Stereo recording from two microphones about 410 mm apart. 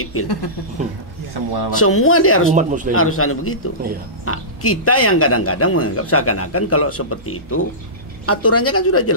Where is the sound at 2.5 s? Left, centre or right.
Centre.